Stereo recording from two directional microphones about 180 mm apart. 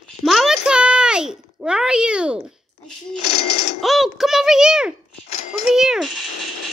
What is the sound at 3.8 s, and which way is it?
A child's voice, centre (ahead or behind).